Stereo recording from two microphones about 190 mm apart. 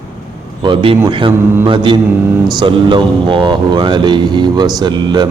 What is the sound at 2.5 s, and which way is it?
Mantra, 25° right (ahead or behind).